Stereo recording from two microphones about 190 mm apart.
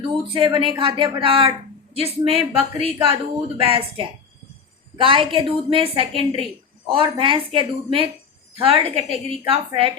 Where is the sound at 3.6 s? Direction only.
30° right (ahead or behind).